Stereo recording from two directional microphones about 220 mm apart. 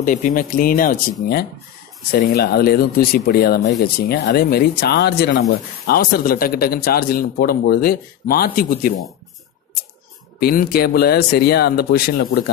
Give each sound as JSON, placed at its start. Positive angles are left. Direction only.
{"t": 0.0, "sound": "speech", "side_deg": 35}
{"t": 2.0, "sound": "speech", "side_deg": 45}
{"t": 10.4, "sound": "speech", "side_deg": 45}